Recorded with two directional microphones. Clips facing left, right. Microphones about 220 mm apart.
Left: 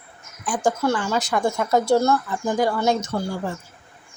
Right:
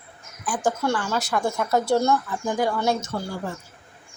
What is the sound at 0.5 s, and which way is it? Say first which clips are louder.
A woman's voice: left 3 dB; 10° left (ahead or behind).